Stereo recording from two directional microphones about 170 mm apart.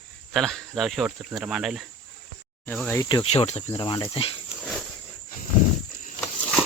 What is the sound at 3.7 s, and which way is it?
Speech, 25° left (ahead or behind).